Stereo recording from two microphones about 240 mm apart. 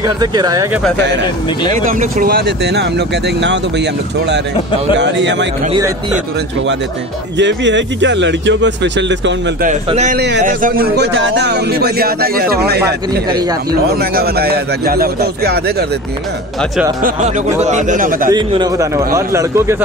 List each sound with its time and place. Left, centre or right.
0.0 s speech: centre
1.9 s speech: right
7.3 s speech: right
9.7 s a man's voice: right
10.1 s a man's voice: right
12.8 s speech: centre
13.9 s a man's voice: right
17.6 s a man's voice: right
18.3 s speech: centre